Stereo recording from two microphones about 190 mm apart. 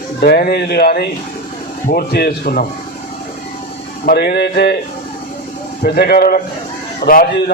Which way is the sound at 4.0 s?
55° left (ahead or behind).